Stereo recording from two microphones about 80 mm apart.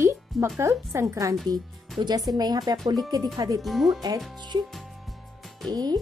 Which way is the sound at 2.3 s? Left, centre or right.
Right.